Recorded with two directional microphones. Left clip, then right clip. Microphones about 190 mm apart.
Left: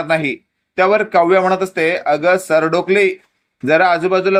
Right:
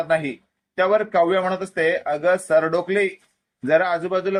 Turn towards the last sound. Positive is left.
turn(degrees=20)  # may be behind; listen again after turning